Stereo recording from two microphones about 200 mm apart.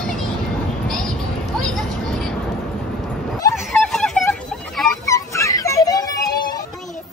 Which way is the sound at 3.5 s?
Centre (ahead or behind).